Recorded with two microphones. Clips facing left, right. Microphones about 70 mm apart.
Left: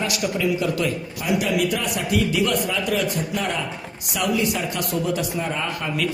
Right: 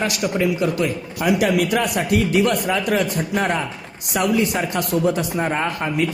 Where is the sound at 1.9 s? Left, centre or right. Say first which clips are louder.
Right 4 dB; right.